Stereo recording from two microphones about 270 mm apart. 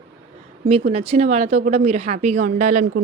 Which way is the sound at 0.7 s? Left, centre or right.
Right.